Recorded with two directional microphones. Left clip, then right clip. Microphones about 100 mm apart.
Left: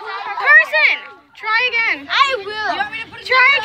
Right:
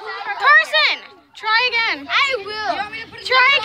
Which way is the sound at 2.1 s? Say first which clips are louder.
Left 3 dB; 5° right (ahead or behind).